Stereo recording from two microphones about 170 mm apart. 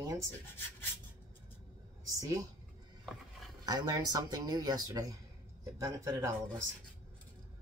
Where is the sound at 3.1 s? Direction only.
Centre (ahead or behind).